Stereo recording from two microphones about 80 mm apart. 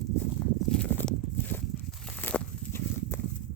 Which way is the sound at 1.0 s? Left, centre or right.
Left.